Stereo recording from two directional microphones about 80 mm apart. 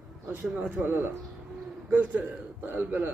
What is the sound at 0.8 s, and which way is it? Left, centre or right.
A man's voice, right.